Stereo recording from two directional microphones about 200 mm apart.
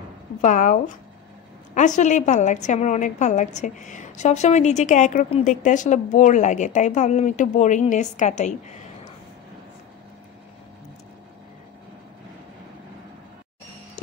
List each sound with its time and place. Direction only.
0.4 s a woman's voice: 40° left (ahead or behind)
1.8 s a woman's voice: 35° left (ahead or behind)